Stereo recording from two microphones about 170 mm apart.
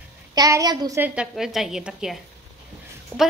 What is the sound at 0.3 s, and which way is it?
Speech, 20° right (ahead or behind).